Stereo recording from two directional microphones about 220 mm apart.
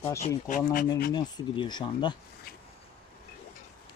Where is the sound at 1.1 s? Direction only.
20° left (ahead or behind).